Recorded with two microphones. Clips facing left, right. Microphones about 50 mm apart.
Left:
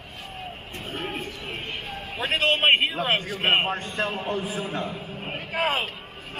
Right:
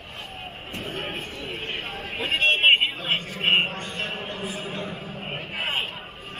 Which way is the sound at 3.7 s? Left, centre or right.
Right.